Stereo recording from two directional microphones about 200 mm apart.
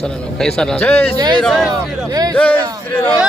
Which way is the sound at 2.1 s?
20° right (ahead or behind).